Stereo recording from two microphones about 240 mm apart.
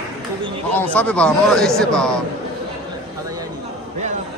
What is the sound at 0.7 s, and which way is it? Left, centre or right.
Speech, centre.